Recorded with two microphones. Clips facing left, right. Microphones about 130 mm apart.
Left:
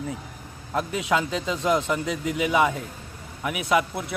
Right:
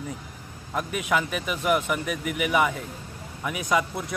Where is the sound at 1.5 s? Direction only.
10° right (ahead or behind).